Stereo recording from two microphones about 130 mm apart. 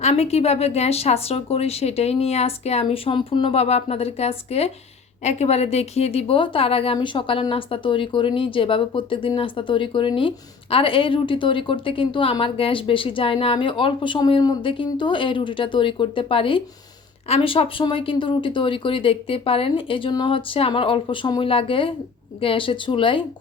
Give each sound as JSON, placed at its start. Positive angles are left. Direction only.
{"t": 0.0, "sound": "speech", "side_deg": 50}